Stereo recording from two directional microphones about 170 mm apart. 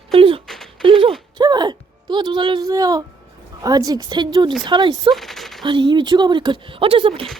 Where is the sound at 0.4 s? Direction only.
Centre (ahead or behind).